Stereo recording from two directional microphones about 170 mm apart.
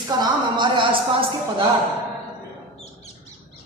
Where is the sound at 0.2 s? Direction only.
25° right (ahead or behind).